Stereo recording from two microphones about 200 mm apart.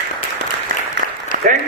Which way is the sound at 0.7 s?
45° right (ahead or behind).